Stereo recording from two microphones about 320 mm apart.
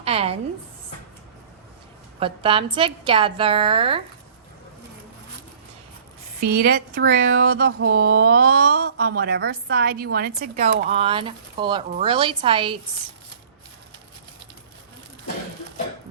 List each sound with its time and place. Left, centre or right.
0.0 s a woman's voice: centre
2.1 s a woman's voice: centre
6.6 s speech: right
10.8 s a woman's voice: centre